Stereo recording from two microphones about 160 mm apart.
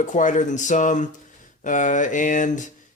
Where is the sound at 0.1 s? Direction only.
50° left (ahead or behind).